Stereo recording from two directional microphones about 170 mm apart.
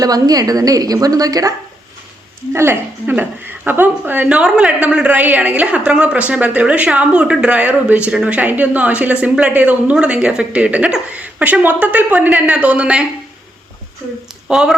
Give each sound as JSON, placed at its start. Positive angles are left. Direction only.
{"t": 0.0, "sound": "a woman's voice", "side_deg": -20}
{"t": 14.4, "sound": "speech", "side_deg": -5}